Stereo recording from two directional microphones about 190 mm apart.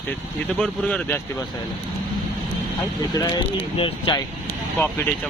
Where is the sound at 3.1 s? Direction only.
20° left (ahead or behind).